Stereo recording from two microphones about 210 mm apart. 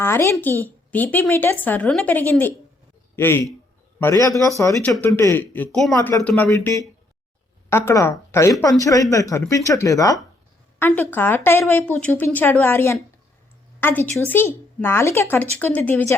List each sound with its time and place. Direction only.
0.0 s a woman's voice: 10° left (ahead or behind)